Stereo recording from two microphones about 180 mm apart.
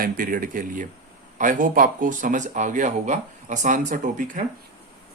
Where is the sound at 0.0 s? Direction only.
50° right (ahead or behind).